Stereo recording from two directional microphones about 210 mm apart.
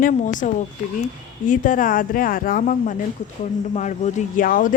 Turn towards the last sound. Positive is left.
turn(degrees=40)  # may be behind; listen again after turning